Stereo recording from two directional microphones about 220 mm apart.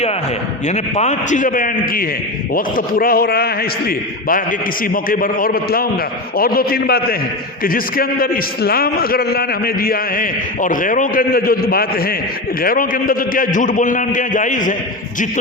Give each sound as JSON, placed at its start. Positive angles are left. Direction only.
{"t": 0.7, "sound": "a man's voice", "side_deg": 30}